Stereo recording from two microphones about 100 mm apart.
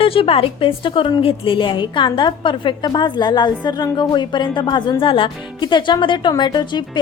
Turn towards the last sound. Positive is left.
turn(degrees=45)  # may be behind; listen again after turning